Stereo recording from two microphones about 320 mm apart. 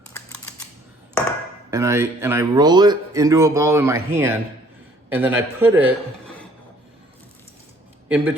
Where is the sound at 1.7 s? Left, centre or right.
Centre.